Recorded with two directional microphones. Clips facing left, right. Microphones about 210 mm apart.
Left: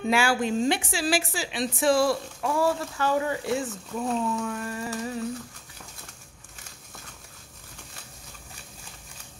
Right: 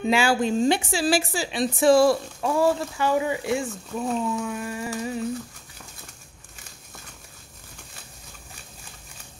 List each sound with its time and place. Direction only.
0.0 s speech: 20° right (ahead or behind)
2.4 s speech: 20° right (ahead or behind)